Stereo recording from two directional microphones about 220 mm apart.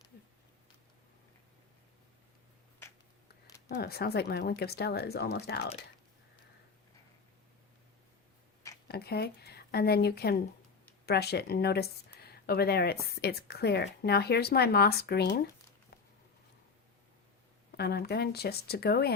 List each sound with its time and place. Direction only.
3.7 s speech: 45° left (ahead or behind)
8.9 s speech: 45° left (ahead or behind)
17.7 s speech: 45° left (ahead or behind)